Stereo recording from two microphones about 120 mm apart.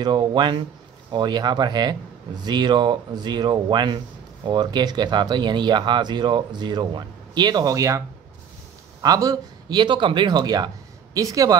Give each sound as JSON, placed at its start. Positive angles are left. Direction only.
{"t": 0.0, "sound": "speech", "side_deg": -40}
{"t": 9.0, "sound": "speech", "side_deg": -35}